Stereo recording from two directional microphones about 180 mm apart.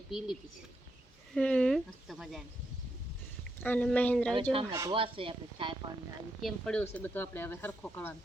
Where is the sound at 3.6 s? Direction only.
10° left (ahead or behind).